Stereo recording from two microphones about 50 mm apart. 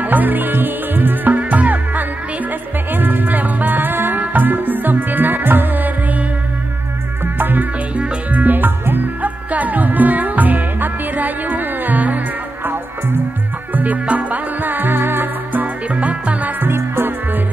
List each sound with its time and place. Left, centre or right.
0.0 s music: right
7.3 s music: right
7.9 s music: right
9.5 s music: right
13.7 s music: right
15.6 s music: right
16.6 s music: right